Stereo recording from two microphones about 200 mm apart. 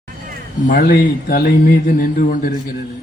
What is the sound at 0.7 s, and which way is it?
A man's voice, 45° left (ahead or behind).